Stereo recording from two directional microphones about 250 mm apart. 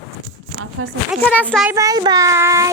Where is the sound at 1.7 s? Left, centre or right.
Centre.